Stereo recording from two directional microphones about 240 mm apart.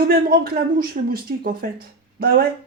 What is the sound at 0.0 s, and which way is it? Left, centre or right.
Speech, right.